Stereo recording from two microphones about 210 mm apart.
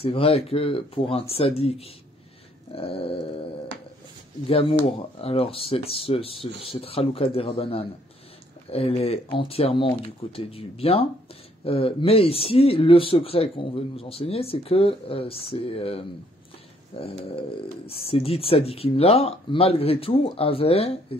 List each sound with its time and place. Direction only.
0.0 s speech: 25° left (ahead or behind)
4.5 s speech: 25° left (ahead or behind)
17.2 s speech: 25° left (ahead or behind)